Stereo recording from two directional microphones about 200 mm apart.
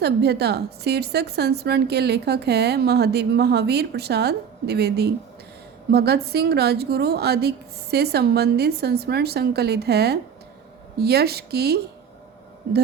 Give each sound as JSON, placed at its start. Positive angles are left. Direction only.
{"t": 0.0, "sound": "a woman's voice", "side_deg": -55}